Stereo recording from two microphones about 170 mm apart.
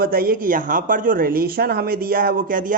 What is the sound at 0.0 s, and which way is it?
Speech, 60° right (ahead or behind).